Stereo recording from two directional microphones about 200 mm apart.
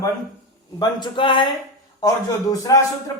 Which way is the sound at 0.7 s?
20° left (ahead or behind).